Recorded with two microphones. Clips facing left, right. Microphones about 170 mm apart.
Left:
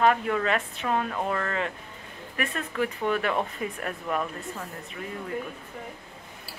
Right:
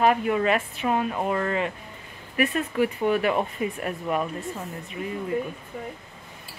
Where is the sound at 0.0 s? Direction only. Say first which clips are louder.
Right 2 dB; 15° right (ahead or behind).